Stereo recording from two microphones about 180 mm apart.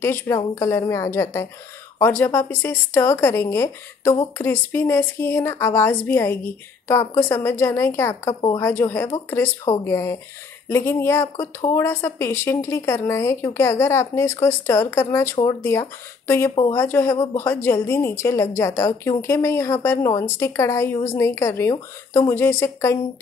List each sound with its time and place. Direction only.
0.0 s speech: 15° left (ahead or behind)